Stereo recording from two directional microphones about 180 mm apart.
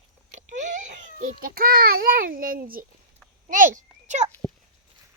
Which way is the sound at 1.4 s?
55° right (ahead or behind).